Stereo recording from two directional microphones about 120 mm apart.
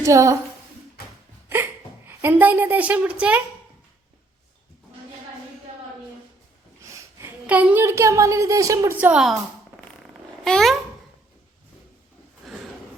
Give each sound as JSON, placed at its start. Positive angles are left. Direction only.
{"t": 0.0, "sound": "speech", "side_deg": -25}
{"t": 1.5, "sound": "a woman's voice", "side_deg": -15}
{"t": 7.4, "sound": "speech", "side_deg": -10}
{"t": 9.0, "sound": "a woman's voice", "side_deg": -15}
{"t": 10.4, "sound": "speech", "side_deg": 0}